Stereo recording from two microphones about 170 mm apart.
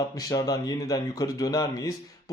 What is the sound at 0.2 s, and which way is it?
Speech, 20° left (ahead or behind).